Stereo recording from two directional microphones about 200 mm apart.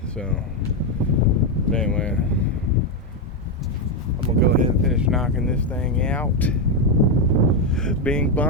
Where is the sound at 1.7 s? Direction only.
5° left (ahead or behind).